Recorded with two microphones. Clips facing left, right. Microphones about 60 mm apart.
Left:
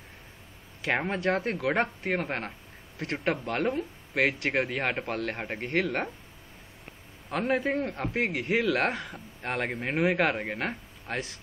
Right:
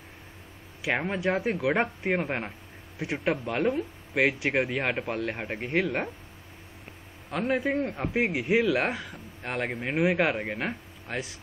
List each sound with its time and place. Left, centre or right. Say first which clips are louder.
0.8 s a man's voice: even; centre
3.0 s a man's voice: right 1 dB; centre
4.7 s a man's voice: right 1 dB; centre
7.2 s a man's voice: even; centre
8.2 s speech: right 3 dB; centre
8.5 s a man's voice: right 1 dB; centre